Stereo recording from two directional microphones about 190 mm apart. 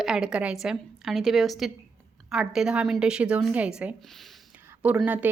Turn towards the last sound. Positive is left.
turn(degrees=-5)  # may be behind; listen again after turning